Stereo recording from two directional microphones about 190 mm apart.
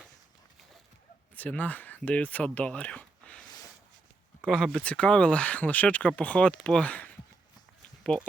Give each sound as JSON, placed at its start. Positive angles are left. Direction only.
{"t": 1.4, "sound": "speech", "side_deg": 10}
{"t": 3.4, "sound": "a sound", "side_deg": 20}
{"t": 4.4, "sound": "speech", "side_deg": 0}